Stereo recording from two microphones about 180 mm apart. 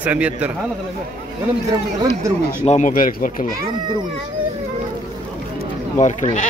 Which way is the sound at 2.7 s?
45° left (ahead or behind).